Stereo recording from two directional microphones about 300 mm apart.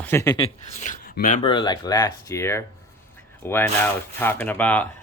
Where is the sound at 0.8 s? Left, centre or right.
Left.